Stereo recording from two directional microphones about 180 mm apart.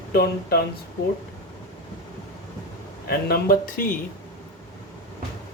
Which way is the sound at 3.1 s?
60° left (ahead or behind).